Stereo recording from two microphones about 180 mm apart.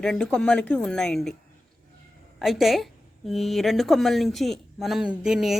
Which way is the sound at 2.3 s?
Centre (ahead or behind).